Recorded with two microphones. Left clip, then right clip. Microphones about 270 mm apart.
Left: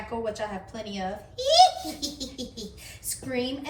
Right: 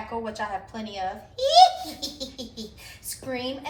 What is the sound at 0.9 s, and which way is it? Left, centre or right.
A woman's voice, centre.